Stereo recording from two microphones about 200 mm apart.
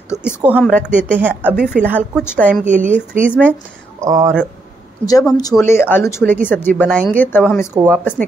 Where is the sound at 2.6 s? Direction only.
40° right (ahead or behind).